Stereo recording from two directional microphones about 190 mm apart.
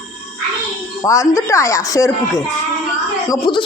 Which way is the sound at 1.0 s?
15° left (ahead or behind).